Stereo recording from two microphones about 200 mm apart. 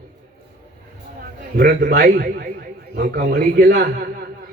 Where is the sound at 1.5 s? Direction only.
50° right (ahead or behind).